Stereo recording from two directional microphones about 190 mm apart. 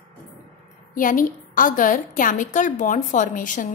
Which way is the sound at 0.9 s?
45° left (ahead or behind).